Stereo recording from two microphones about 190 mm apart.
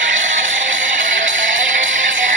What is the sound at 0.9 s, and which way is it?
Music, 45° right (ahead or behind).